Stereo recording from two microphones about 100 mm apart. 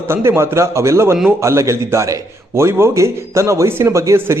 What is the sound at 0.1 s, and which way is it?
A man's voice, 25° right (ahead or behind).